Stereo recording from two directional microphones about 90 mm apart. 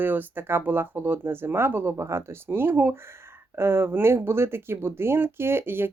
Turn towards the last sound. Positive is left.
turn(degrees=-25)  # may be behind; listen again after turning